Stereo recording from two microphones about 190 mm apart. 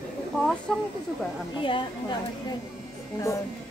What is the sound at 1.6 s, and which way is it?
Speech, 25° left (ahead or behind).